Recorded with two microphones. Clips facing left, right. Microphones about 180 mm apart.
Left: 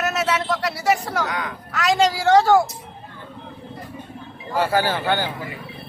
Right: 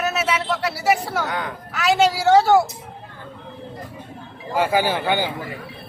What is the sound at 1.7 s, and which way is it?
Speech, 5° right (ahead or behind).